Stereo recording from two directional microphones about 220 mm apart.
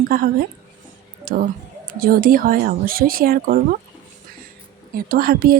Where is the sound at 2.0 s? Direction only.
40° right (ahead or behind).